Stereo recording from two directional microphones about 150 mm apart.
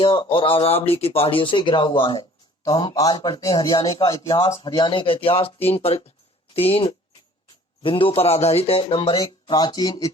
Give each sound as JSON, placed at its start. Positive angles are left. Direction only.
{"t": 0.0, "sound": "a man's voice", "side_deg": 35}
{"t": 4.5, "sound": "speech", "side_deg": 35}